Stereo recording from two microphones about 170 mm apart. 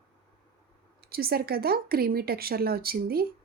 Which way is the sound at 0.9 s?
65° right (ahead or behind).